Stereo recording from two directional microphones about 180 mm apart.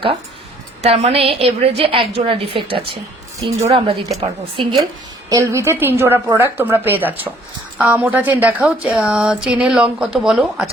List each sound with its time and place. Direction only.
0.8 s a woman's voice: 35° right (ahead or behind)
5.3 s a woman's voice: 15° right (ahead or behind)